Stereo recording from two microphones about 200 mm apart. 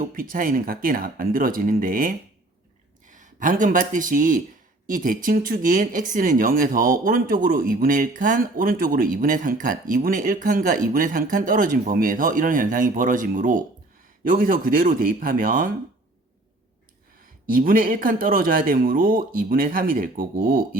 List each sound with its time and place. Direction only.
0.1 s speech: 45° right (ahead or behind)
17.5 s speech: 45° right (ahead or behind)